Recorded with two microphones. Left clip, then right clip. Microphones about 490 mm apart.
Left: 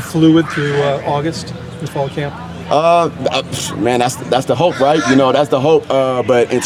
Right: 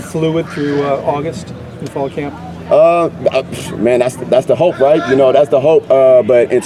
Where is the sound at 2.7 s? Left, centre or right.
Left.